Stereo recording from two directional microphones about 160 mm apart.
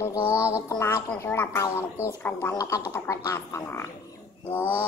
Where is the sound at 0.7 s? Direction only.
15° left (ahead or behind).